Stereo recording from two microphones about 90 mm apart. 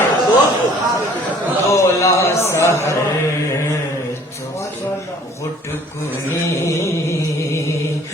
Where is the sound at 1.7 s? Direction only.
35° left (ahead or behind).